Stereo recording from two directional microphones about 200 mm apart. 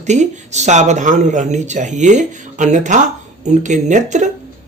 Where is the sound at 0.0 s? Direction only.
35° right (ahead or behind).